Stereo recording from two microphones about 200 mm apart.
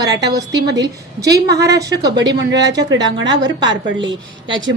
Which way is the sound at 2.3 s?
60° right (ahead or behind).